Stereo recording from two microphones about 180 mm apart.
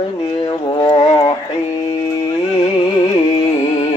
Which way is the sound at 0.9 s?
35° left (ahead or behind).